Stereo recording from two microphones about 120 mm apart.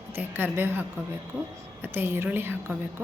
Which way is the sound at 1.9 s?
20° right (ahead or behind).